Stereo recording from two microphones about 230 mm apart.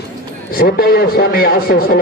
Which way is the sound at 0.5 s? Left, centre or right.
Left.